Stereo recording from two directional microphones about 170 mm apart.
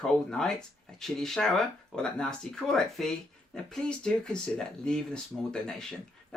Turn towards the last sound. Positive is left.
turn(degrees=5)  # may be behind; listen again after turning